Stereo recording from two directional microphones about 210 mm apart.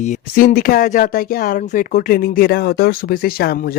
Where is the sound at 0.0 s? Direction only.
40° left (ahead or behind).